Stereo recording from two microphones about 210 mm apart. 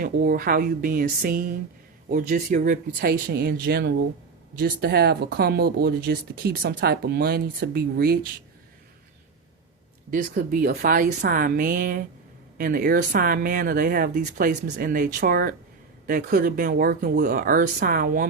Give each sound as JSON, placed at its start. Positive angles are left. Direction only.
{"t": 0.0, "sound": "speech", "side_deg": -45}
{"t": 10.1, "sound": "a woman's voice", "side_deg": -40}